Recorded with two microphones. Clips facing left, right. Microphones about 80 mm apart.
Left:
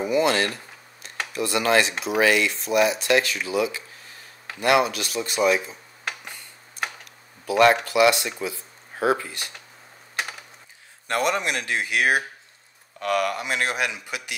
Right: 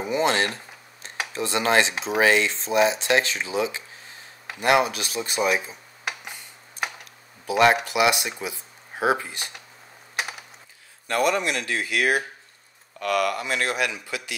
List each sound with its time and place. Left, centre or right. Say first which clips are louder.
0.0 s speech: left 2 dB; right
7.4 s speech: left 1 dB; centre
11.1 s speech: right 1 dB; left